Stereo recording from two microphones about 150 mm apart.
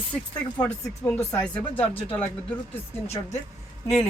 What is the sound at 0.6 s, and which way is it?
Speech, 10° left (ahead or behind).